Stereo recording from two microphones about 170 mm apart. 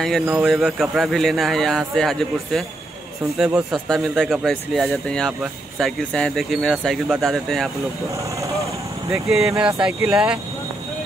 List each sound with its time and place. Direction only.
0.3 s speech: centre (ahead or behind)
8.1 s vehicle: 20° right (ahead or behind)
9.1 s speech: centre (ahead or behind)